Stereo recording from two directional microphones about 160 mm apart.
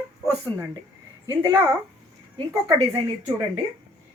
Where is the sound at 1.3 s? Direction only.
20° right (ahead or behind).